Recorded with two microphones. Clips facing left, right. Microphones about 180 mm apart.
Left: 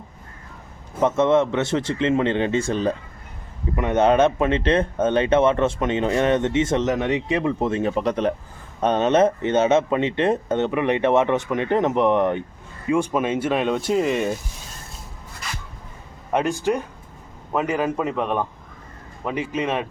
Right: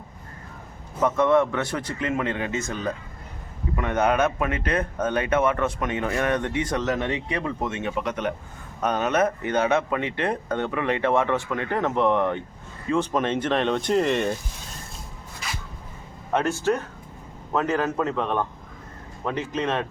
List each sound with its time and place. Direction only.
1.0 s speech: 25° left (ahead or behind)
7.7 s speech: 35° left (ahead or behind); by 14.3 s 5° left (ahead or behind)
16.3 s speech: 15° left (ahead or behind)